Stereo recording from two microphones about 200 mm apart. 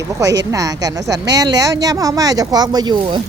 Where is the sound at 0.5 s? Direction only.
15° right (ahead or behind).